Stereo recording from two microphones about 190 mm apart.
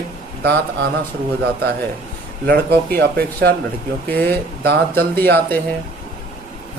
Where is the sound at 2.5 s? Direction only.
55° right (ahead or behind).